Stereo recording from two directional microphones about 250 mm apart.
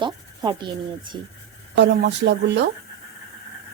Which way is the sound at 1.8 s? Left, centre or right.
Right.